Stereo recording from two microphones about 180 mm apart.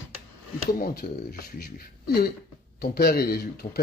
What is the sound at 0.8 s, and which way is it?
Speech, 60° left (ahead or behind).